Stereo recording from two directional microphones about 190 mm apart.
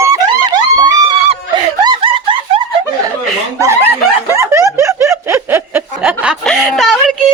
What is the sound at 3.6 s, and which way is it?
Snicker, 15° right (ahead or behind).